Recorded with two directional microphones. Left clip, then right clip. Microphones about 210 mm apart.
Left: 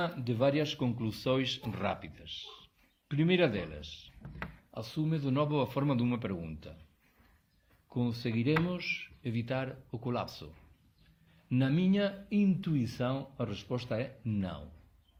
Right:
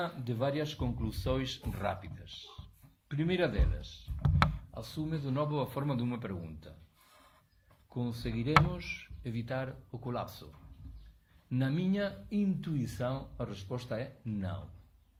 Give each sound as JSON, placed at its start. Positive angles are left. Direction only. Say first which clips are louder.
{"t": 0.0, "sound": "speech", "louder": "left 4 dB", "side_deg": 45}
{"t": 7.9, "sound": "speech", "louder": "left 4 dB", "side_deg": 40}